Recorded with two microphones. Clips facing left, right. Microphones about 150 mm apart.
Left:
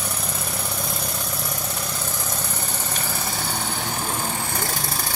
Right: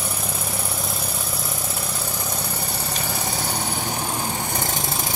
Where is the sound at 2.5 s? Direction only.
10° right (ahead or behind).